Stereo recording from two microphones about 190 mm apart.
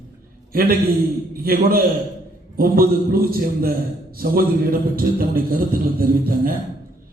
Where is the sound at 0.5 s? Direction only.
50° right (ahead or behind).